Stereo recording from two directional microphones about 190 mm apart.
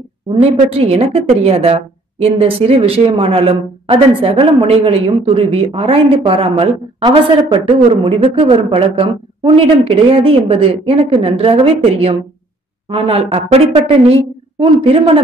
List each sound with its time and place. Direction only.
0.3 s a woman's voice: 30° right (ahead or behind)
14.6 s a woman's voice: 30° right (ahead or behind)